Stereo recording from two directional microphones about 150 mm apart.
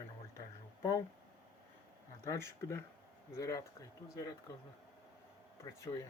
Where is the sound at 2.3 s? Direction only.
20° left (ahead or behind).